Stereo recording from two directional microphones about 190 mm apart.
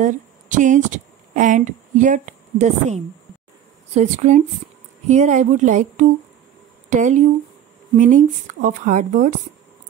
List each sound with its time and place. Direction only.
0.0 s speech: 40° right (ahead or behind)